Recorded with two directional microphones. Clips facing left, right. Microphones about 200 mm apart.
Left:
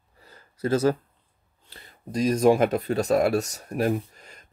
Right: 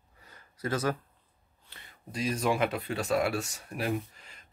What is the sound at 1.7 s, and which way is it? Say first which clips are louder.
Speech: left 10 dB; 35° left (ahead or behind).